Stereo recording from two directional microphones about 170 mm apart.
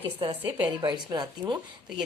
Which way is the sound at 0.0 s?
30° right (ahead or behind).